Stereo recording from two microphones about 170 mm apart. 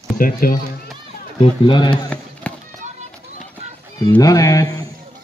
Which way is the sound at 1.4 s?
30° left (ahead or behind).